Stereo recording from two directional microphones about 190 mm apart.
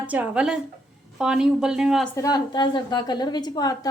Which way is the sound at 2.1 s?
20° left (ahead or behind).